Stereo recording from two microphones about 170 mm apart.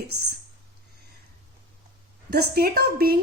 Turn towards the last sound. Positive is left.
turn(degrees=-65)  # may be behind; listen again after turning